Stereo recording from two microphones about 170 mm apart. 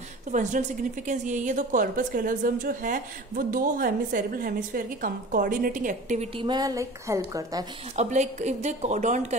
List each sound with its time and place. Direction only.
0.3 s a woman's voice: 45° right (ahead or behind)
6.3 s a woman's voice: 25° right (ahead or behind)
7.9 s a woman's voice: 40° right (ahead or behind)